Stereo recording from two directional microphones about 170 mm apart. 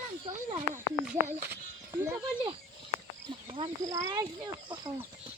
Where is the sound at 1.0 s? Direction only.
15° right (ahead or behind).